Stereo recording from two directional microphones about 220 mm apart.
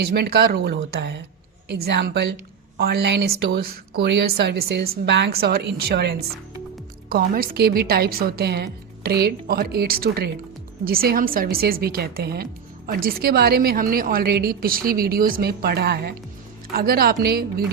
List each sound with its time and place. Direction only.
0.0 s a woman's voice: 45° right (ahead or behind)